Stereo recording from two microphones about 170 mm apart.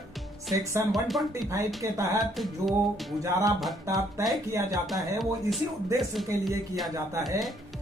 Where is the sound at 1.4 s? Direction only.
20° right (ahead or behind).